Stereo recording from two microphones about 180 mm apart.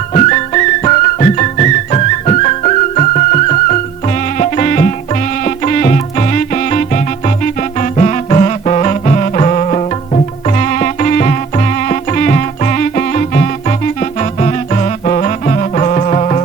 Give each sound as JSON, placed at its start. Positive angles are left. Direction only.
{"t": 0.1, "sound": "music", "side_deg": 40}